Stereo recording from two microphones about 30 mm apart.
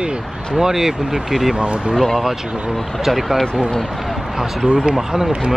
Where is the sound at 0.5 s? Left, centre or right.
Centre.